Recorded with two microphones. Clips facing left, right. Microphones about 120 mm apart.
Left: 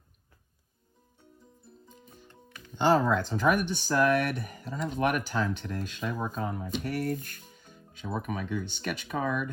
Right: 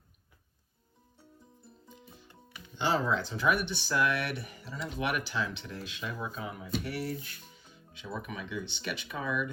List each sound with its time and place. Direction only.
1.9 s music: 45° left (ahead or behind)
2.7 s speech: 50° left (ahead or behind)